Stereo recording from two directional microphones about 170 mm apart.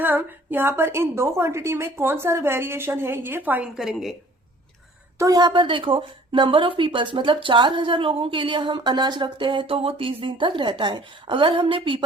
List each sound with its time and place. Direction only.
0.0 s a woman's voice: 10° right (ahead or behind)
5.1 s a woman's voice: 20° right (ahead or behind)